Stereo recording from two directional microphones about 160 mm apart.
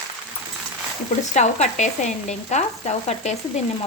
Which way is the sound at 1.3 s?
45° left (ahead or behind).